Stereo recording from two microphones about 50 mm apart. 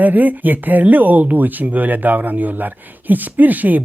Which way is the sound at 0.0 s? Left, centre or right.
Right.